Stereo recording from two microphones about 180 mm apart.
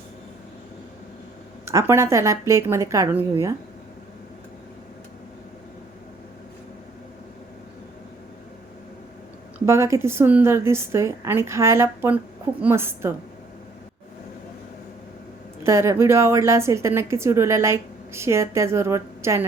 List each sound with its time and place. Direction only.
1.6 s a woman's voice: 15° right (ahead or behind)
9.6 s a woman's voice: 15° right (ahead or behind)
15.6 s a woman's voice: 15° right (ahead or behind)